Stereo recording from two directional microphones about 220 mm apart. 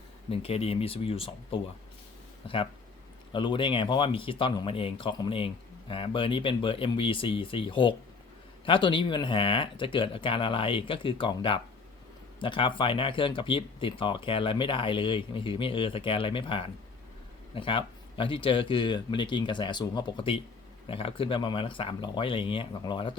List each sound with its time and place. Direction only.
0.3 s speech: 25° left (ahead or behind)